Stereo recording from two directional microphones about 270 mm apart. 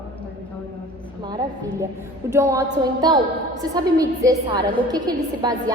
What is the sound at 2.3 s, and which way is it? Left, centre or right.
A woman's voice, centre.